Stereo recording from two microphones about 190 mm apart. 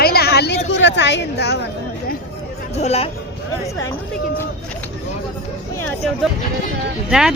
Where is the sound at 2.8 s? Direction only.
35° left (ahead or behind).